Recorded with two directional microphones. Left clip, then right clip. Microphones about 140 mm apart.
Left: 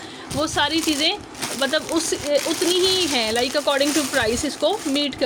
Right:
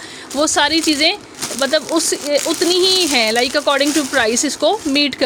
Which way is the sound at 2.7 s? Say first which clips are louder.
Right 6 dB; 60° right (ahead or behind).